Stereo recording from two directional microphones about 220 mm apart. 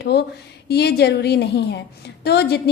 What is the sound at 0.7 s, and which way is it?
A woman's voice, 45° left (ahead or behind).